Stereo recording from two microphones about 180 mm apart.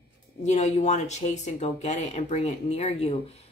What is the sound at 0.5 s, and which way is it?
Speech, 40° left (ahead or behind).